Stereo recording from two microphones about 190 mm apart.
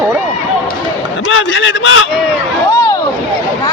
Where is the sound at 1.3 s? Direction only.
90° left.